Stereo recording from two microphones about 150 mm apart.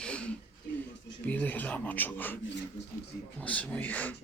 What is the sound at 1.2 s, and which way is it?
Speech, 10° left (ahead or behind).